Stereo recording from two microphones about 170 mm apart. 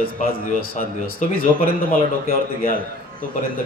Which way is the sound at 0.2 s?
55° left (ahead or behind).